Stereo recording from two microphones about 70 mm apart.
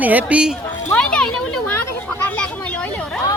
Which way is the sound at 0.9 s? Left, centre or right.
Centre.